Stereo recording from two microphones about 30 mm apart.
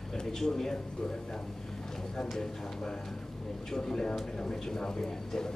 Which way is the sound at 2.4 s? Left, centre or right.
Left.